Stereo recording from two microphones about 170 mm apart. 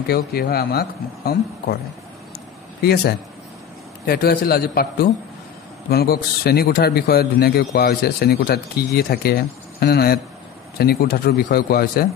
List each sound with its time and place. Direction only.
0.0 s speech: 65° left (ahead or behind)
2.8 s a man's voice: 70° left (ahead or behind)